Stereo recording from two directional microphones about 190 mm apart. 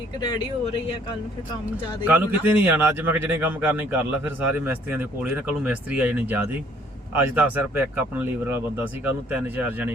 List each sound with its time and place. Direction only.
2.0 s speech: 10° right (ahead or behind)